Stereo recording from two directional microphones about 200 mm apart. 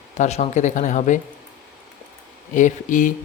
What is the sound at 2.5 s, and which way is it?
Speech, 40° left (ahead or behind).